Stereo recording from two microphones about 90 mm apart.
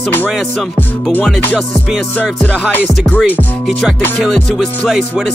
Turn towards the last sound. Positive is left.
turn(degrees=20)  # may be behind; listen again after turning